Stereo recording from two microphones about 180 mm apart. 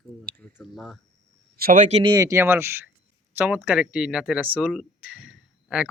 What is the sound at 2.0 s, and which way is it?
Speech, 20° right (ahead or behind).